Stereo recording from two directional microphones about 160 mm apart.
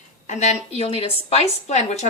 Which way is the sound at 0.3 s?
45° left (ahead or behind).